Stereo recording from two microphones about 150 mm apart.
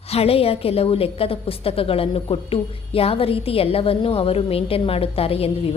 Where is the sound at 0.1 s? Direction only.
40° left (ahead or behind).